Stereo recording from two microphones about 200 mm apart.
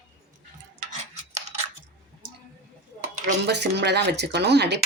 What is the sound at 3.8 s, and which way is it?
Speech, 60° right (ahead or behind).